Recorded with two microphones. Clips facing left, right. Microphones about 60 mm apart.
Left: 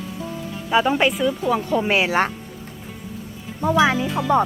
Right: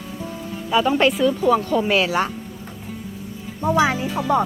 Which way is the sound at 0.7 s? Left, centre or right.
Left.